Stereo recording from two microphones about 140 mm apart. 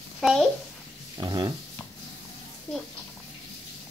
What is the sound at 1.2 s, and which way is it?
Speech, 30° right (ahead or behind).